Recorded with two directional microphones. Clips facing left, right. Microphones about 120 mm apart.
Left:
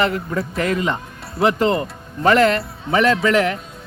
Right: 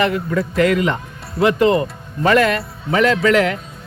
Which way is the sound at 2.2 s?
35° left (ahead or behind).